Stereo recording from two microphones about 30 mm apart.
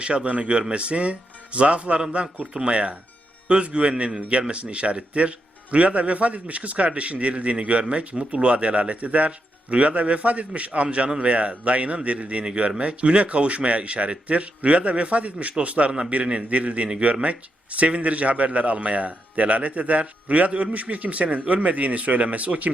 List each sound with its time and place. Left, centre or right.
0.0 s a man's voice: right